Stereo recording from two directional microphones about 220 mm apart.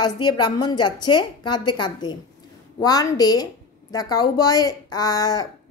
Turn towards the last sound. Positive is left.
turn(degrees=15)  # may be behind; listen again after turning